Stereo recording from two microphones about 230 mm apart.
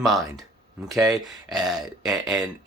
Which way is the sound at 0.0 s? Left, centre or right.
Centre.